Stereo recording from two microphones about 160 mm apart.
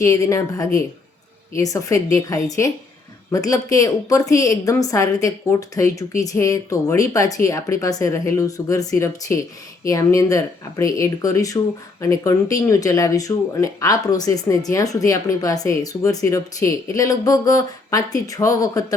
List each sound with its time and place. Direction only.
0.0 s speech: 20° left (ahead or behind)